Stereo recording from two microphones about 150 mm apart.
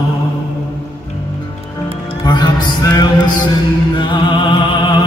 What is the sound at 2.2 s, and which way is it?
Mantra, 30° left (ahead or behind).